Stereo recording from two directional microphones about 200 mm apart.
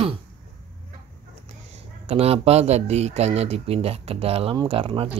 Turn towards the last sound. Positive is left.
turn(degrees=-30)  # may be behind; listen again after turning